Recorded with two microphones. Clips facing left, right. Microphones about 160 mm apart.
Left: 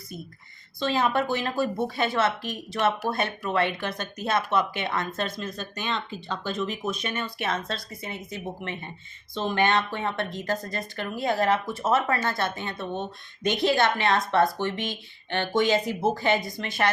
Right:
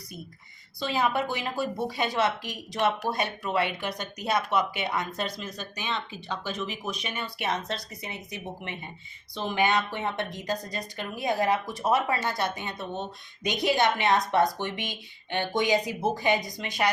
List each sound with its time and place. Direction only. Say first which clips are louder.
0.9 s speech: left 3 dB; 10° right (ahead or behind)